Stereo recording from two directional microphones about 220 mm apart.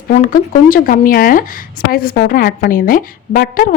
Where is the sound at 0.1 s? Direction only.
35° left (ahead or behind).